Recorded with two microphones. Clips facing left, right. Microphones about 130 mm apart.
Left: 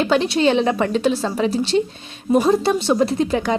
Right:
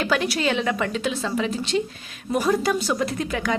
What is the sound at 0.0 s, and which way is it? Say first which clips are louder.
A woman's voice: left 6 dB; 25° left (ahead or behind).